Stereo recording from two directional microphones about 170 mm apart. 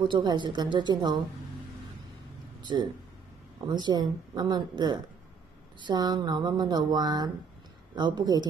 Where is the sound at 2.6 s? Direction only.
25° right (ahead or behind).